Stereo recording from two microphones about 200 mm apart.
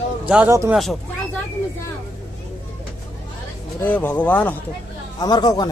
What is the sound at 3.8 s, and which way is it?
Speech, 10° left (ahead or behind).